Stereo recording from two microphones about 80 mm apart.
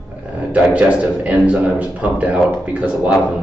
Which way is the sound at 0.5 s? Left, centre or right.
Centre.